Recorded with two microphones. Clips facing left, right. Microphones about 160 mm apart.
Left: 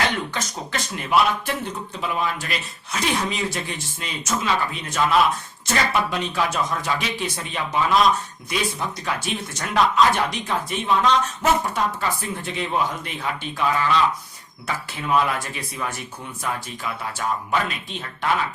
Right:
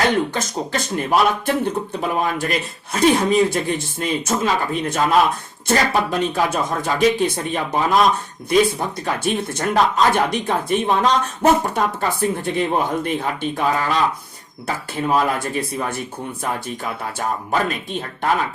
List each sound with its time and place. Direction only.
0.7 s speech: 45° right (ahead or behind)